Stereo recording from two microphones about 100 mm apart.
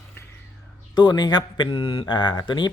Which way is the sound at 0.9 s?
45° left (ahead or behind).